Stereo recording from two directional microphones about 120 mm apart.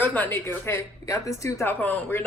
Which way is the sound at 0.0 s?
15° left (ahead or behind).